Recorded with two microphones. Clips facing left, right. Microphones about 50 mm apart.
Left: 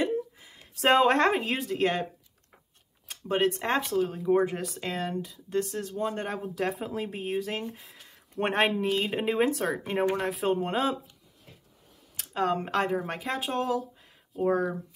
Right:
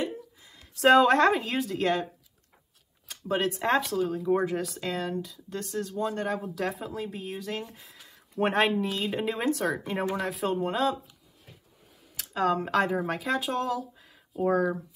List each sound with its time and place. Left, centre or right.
0.0 s a sound: left
0.7 s speech: centre
3.1 s a sound: centre
3.4 s speech: centre
6.8 s speech: left
7.6 s speech: centre
12.2 s speech: centre